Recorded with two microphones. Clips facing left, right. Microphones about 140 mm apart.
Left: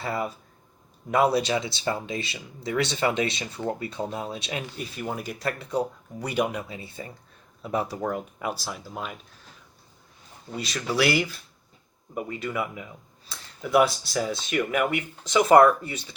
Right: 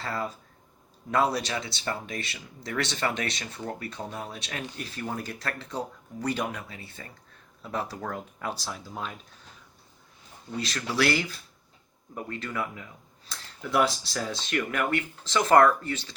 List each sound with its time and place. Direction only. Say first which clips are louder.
0.0 s speech: left 3 dB; 15° left (ahead or behind)
10.7 s speech: left 2 dB; 5° left (ahead or behind)